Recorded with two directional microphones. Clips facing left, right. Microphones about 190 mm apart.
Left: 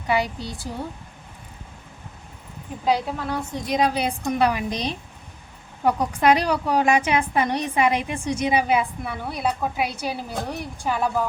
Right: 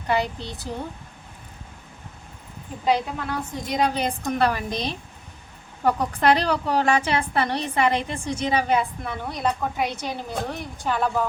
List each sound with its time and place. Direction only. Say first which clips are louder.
0.1 s a woman's voice: left 1 dB; 10° left (ahead or behind)
2.8 s a woman's voice: even; centre (ahead or behind)